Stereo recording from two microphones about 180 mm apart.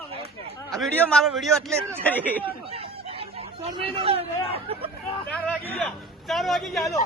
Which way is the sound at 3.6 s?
35° right (ahead or behind).